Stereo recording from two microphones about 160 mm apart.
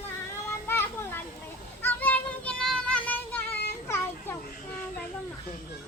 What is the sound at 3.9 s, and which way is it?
Speech, 15° left (ahead or behind).